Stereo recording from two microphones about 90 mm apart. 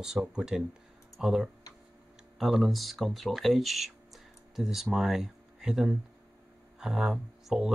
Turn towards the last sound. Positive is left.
turn(degrees=-5)  # may be behind; listen again after turning